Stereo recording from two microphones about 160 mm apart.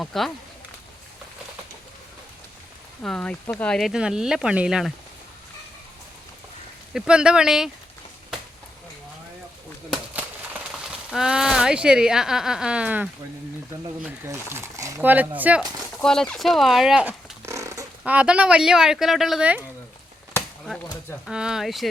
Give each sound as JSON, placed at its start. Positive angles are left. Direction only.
{"t": 0.0, "sound": "speech", "side_deg": 0}
{"t": 3.0, "sound": "speech", "side_deg": 5}
{"t": 6.9, "sound": "speech", "side_deg": -5}
{"t": 9.9, "sound": "speech", "side_deg": -5}
{"t": 14.3, "sound": "speech", "side_deg": -15}
{"t": 16.0, "sound": "a sound", "side_deg": 5}
{"t": 18.0, "sound": "speech", "side_deg": -10}
{"t": 21.2, "sound": "speech", "side_deg": -5}